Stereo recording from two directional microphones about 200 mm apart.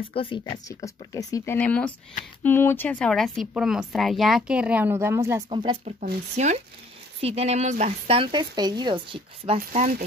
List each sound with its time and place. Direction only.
0.1 s speech: 25° left (ahead or behind); by 5.4 s 15° right (ahead or behind)
5.5 s speech: 25° right (ahead or behind)
5.9 s speech: 35° right (ahead or behind)
9.6 s speech: 40° right (ahead or behind)